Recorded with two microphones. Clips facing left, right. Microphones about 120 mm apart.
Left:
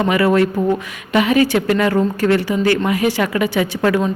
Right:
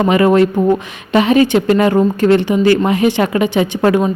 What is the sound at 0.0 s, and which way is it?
Speech, 25° right (ahead or behind).